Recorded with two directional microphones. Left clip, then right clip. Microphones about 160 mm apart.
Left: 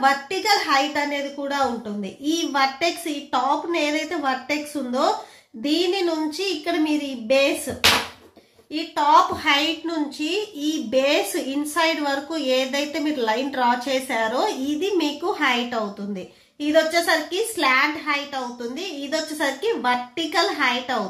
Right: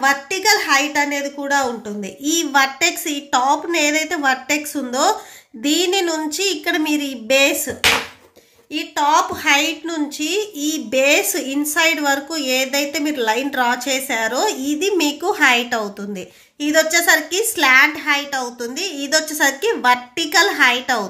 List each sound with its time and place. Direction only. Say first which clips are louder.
0.0 s a woman's voice: right 3 dB; 30° right (ahead or behind)
8.7 s a woman's voice: right 1 dB; 30° right (ahead or behind); by 15.8 s 50° right (ahead or behind)
16.6 s a woman's voice: right 4 dB; 40° right (ahead or behind)